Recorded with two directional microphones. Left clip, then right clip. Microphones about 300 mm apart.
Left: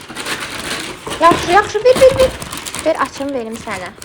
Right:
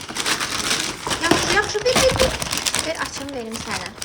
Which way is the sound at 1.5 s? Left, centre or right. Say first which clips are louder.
Left 8 dB; centre.